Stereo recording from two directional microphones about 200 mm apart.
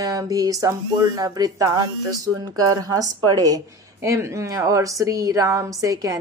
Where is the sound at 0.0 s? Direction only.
15° right (ahead or behind).